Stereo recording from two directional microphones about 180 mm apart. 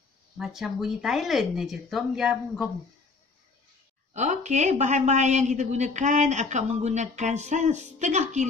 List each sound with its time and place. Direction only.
0.4 s speech: centre (ahead or behind)
4.1 s a woman's voice: 40° right (ahead or behind)